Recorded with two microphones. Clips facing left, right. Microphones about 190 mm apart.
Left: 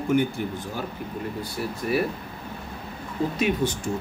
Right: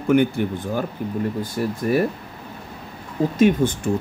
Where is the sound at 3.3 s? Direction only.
45° right (ahead or behind).